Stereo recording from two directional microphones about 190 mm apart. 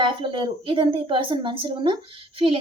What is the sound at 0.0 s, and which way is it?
A woman's voice, 25° right (ahead or behind).